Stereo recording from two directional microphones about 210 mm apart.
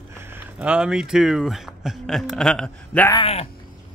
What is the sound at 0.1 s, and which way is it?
Speech, 10° right (ahead or behind).